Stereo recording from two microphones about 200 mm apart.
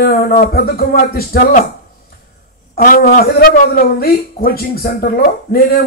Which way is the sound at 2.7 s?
45° left (ahead or behind).